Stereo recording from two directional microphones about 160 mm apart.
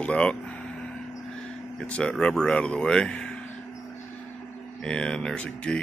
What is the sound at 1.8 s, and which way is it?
Speech, 5° left (ahead or behind).